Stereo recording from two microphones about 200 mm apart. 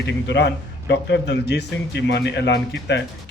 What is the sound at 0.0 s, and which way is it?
A man's voice, 60° left (ahead or behind).